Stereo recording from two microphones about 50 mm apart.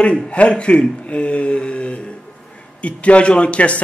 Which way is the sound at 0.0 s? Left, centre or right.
Left.